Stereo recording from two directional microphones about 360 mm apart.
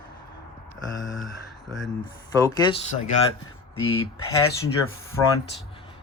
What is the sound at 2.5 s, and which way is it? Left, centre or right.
Speech, centre.